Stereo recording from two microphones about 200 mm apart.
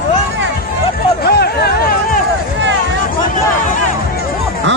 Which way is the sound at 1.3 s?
50° left (ahead or behind).